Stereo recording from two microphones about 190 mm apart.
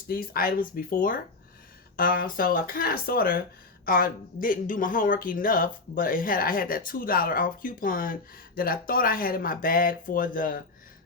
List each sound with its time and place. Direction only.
0.1 s speech: 50° left (ahead or behind)